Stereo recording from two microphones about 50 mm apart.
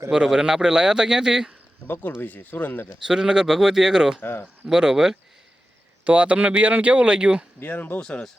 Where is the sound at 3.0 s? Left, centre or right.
Centre.